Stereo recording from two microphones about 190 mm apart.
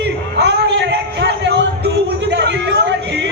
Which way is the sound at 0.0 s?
65° right (ahead or behind).